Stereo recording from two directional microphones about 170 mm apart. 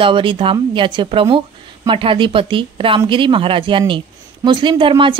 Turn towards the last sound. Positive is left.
turn(degrees=-30)  # may be behind; listen again after turning